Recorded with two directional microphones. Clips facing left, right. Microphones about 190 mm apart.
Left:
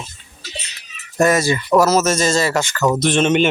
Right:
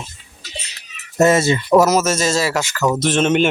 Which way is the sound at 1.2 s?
25° right (ahead or behind).